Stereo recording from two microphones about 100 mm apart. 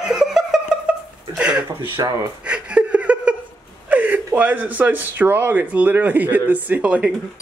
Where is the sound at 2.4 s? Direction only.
10° right (ahead or behind).